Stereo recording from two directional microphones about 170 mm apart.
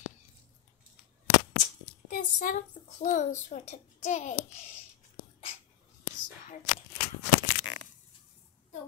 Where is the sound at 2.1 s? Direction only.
50° left (ahead or behind).